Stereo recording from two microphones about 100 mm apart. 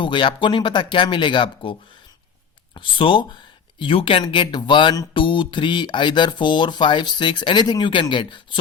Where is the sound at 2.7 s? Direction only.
55° left (ahead or behind).